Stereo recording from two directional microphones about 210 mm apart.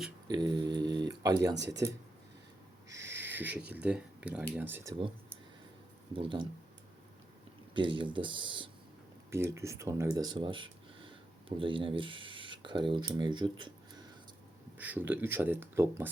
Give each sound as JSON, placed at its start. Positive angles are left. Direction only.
{"t": 0.3, "sound": "speech", "side_deg": -20}
{"t": 1.5, "sound": "speech", "side_deg": -55}
{"t": 3.2, "sound": "speech", "side_deg": -10}
{"t": 6.1, "sound": "speech", "side_deg": -25}
{"t": 7.7, "sound": "speech", "side_deg": -25}
{"t": 9.3, "sound": "speech", "side_deg": -15}
{"t": 14.8, "sound": "speech", "side_deg": -10}